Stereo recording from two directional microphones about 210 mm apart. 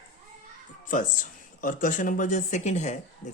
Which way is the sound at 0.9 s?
40° left (ahead or behind).